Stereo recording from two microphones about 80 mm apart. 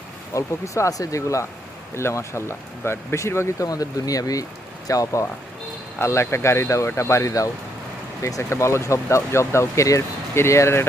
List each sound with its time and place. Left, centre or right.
0.3 s speech: left
3.7 s speech: left
6.0 s speech: left